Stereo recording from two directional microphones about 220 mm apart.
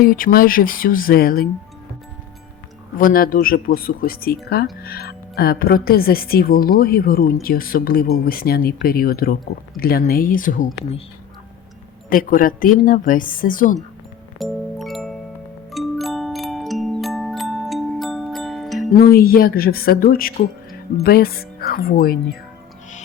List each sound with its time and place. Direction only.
0.0 s speech: 40° left (ahead or behind)
3.0 s speech: 40° left (ahead or behind)
12.0 s speech: 40° left (ahead or behind)
14.3 s music: centre (ahead or behind)
15.7 s glockenspiel: centre (ahead or behind)
18.9 s speech: 45° left (ahead or behind)